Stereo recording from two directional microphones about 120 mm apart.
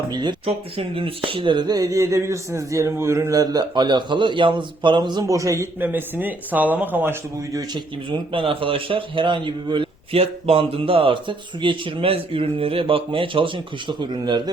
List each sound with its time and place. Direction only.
0.1 s speech: 40° right (ahead or behind)
0.4 s speech: 50° right (ahead or behind)
5.2 s a man's voice: 25° right (ahead or behind)
5.8 s speech: 15° right (ahead or behind)
7.5 s a man's voice: 40° right (ahead or behind)